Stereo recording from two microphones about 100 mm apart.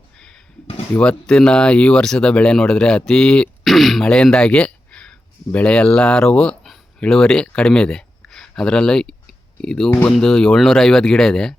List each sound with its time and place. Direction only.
0.9 s speech: 10° left (ahead or behind)